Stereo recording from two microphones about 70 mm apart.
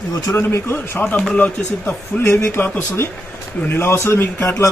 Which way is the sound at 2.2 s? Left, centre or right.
Left.